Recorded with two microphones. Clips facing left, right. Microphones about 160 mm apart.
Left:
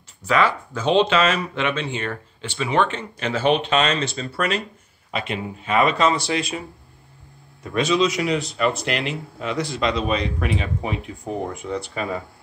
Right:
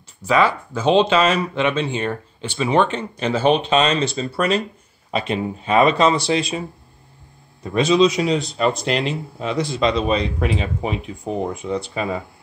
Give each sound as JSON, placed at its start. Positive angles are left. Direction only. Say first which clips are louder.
{"t": 0.4, "sound": "speech", "louder": "right 2 dB", "side_deg": -10}
{"t": 2.9, "sound": "speech", "louder": "right 4 dB", "side_deg": -30}
{"t": 7.6, "sound": "speech", "louder": "right 4 dB", "side_deg": -25}